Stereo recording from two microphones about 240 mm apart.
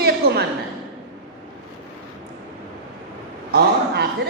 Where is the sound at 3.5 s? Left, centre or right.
Right.